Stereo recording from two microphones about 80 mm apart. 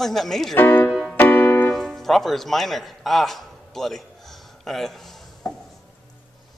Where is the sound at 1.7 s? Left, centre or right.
Centre.